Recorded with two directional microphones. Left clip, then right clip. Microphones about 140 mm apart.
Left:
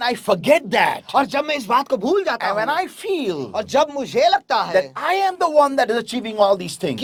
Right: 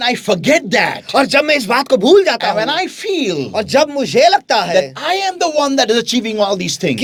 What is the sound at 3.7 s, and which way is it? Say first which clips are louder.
Speech: right 5 dB; 35° right (ahead or behind).